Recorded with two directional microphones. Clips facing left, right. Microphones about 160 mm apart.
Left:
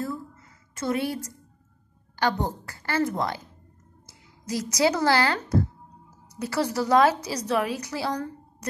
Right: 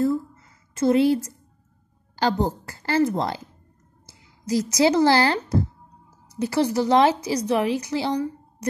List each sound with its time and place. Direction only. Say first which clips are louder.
0.7 s a woman's voice: right 9 dB; 25° right (ahead or behind)
4.5 s a woman's voice: right 4 dB; 30° right (ahead or behind)